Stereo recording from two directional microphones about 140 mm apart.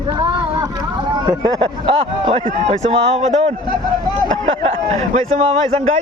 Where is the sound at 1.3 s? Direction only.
25° right (ahead or behind).